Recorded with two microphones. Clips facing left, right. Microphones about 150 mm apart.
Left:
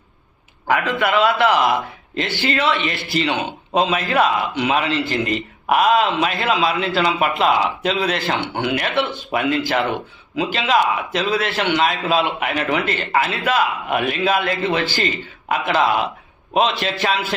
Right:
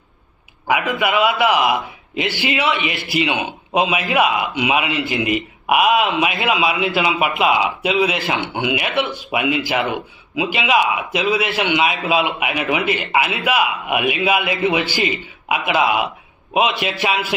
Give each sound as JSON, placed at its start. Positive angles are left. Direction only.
{"t": 0.7, "sound": "a man's voice", "side_deg": -10}